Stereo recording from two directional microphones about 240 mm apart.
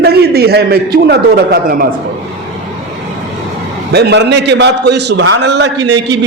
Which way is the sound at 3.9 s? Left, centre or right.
Right.